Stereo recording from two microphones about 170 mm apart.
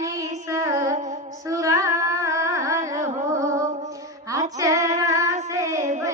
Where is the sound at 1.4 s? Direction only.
20° right (ahead or behind).